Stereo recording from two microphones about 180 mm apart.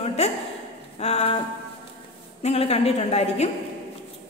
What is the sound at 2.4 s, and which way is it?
A woman's voice, 35° left (ahead or behind).